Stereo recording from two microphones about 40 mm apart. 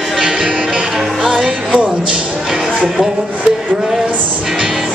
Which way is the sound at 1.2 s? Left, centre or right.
Right.